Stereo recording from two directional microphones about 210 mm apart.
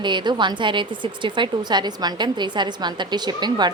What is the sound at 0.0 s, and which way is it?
A woman's voice, 20° right (ahead or behind).